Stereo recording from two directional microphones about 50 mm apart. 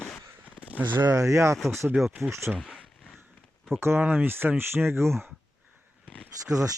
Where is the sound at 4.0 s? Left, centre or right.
Right.